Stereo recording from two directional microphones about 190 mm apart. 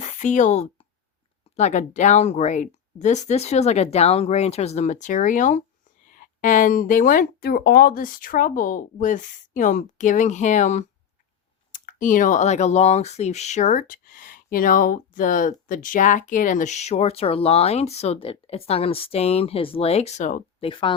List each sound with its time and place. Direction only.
0.0 s speech: 40° left (ahead or behind)
20.7 s speech: 25° left (ahead or behind)